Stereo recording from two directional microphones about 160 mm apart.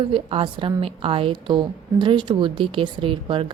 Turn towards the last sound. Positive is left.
turn(degrees=-35)  # may be behind; listen again after turning